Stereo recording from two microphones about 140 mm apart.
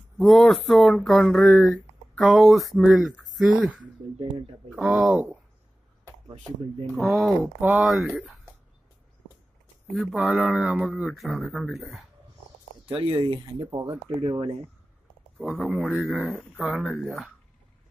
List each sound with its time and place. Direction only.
0.2 s speech: centre (ahead or behind)
4.2 s speech: 40° right (ahead or behind)
4.7 s speech: 5° right (ahead or behind)
7.0 s speech: centre (ahead or behind)
9.9 s speech: 5° right (ahead or behind)
12.8 s speech: 40° right (ahead or behind)
15.3 s speech: centre (ahead or behind)
16.2 s speech: 10° left (ahead or behind)
16.6 s speech: centre (ahead or behind)